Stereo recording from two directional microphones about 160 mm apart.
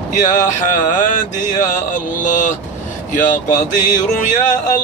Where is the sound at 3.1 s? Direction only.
55° left (ahead or behind).